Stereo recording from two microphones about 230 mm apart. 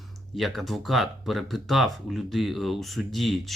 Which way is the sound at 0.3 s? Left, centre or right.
Centre.